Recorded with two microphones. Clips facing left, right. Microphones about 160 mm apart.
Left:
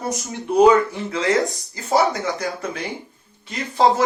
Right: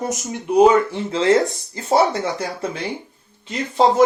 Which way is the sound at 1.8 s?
30° right (ahead or behind).